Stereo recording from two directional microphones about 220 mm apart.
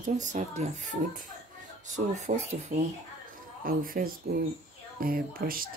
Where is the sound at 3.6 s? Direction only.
40° right (ahead or behind).